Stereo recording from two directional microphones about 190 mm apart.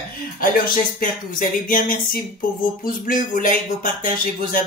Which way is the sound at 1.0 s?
45° left (ahead or behind).